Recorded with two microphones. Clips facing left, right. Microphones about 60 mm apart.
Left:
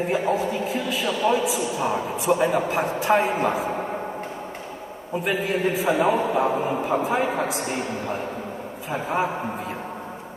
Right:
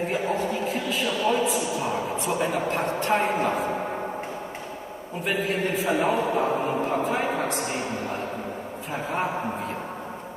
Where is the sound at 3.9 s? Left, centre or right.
Centre.